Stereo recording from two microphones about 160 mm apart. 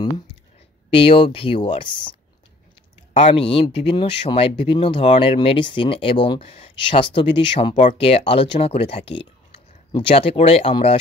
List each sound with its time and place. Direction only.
0.8 s speech: 35° left (ahead or behind)
3.1 s speech: 45° left (ahead or behind)